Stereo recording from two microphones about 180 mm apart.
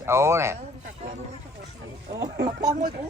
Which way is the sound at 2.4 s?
55° right (ahead or behind).